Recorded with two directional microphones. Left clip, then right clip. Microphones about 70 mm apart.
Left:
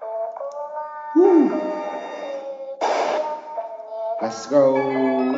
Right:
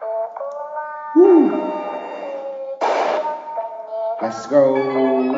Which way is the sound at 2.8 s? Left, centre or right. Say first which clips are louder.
Right 2 dB; centre.